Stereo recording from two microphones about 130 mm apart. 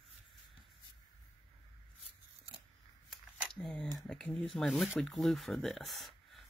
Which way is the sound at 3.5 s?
5° left (ahead or behind).